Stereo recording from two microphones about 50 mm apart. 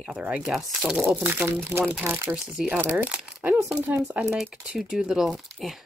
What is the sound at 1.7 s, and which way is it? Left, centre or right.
Speech, right.